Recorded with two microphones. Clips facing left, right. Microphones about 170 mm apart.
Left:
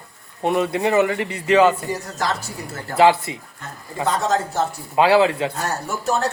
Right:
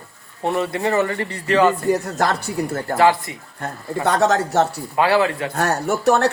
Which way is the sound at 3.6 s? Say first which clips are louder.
Right 12 dB; 55° right (ahead or behind).